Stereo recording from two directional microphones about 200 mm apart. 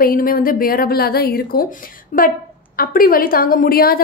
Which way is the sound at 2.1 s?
40° left (ahead or behind).